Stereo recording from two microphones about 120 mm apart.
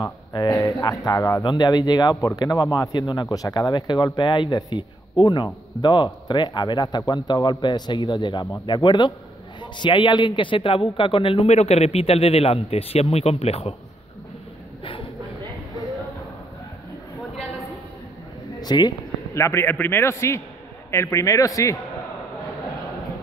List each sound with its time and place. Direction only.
0.0 s speech: 35° left (ahead or behind)
11.4 s speech: 65° left (ahead or behind)
18.6 s speech: 35° left (ahead or behind)
19.3 s a man's voice: 25° left (ahead or behind)